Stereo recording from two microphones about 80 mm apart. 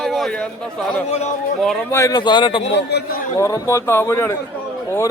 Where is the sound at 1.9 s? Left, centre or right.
Left.